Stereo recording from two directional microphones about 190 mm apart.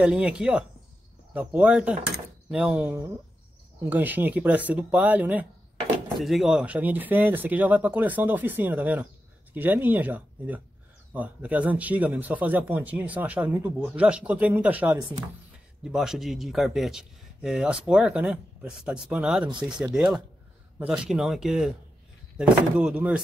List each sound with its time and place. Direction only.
0.0 s a man's voice: 5° right (ahead or behind)